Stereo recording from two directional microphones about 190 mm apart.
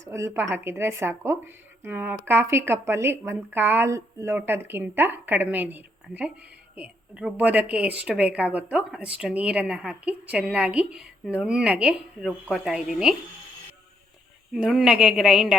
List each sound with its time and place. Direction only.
0.0 s a woman's voice: 15° right (ahead or behind)
14.5 s a woman's voice: centre (ahead or behind)